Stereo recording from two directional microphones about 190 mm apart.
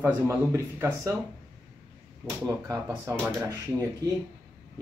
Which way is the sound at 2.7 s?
15° right (ahead or behind).